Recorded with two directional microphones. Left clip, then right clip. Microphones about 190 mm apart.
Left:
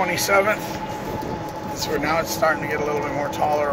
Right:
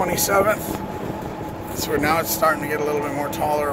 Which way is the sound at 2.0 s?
50° right (ahead or behind).